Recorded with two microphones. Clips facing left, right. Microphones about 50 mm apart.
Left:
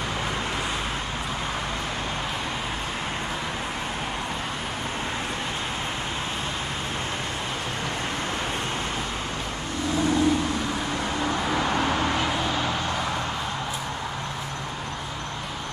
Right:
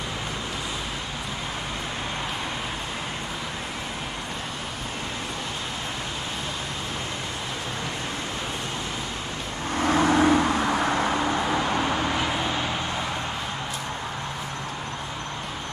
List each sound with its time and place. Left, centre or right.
9.8 s vehicle: right
11.4 s vehicle: centre